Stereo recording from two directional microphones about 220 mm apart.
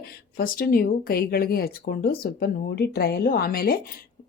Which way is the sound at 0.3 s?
40° left (ahead or behind).